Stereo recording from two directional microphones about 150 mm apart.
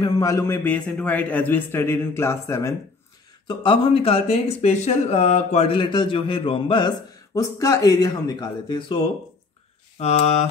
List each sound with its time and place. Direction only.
0.0 s a man's voice: 20° left (ahead or behind)
3.4 s speech: 35° left (ahead or behind)
9.9 s mantra: 45° left (ahead or behind)